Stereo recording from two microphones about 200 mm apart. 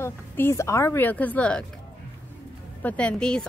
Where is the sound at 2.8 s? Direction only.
5° left (ahead or behind).